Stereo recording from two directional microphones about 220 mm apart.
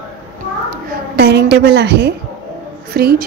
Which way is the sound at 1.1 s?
45° right (ahead or behind).